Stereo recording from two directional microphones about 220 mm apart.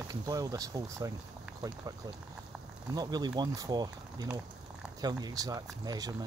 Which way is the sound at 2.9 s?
20° right (ahead or behind).